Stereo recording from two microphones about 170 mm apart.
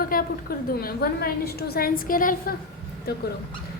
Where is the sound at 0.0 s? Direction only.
55° left (ahead or behind).